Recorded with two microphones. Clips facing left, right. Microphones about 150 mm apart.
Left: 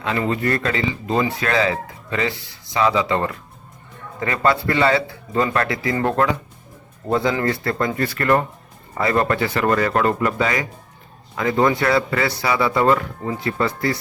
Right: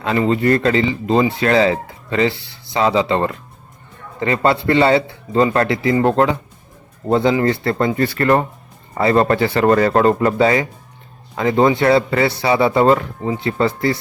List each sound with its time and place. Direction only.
0.0 s speech: 30° right (ahead or behind)